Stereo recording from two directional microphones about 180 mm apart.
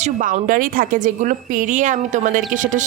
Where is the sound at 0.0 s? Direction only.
45° right (ahead or behind).